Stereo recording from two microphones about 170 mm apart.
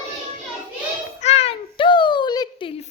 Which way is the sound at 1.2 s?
40° left (ahead or behind).